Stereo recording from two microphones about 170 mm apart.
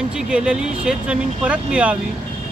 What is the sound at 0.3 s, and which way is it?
Speech, 5° right (ahead or behind).